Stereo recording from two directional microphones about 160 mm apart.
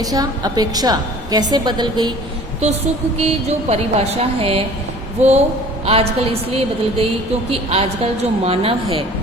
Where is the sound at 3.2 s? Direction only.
40° right (ahead or behind).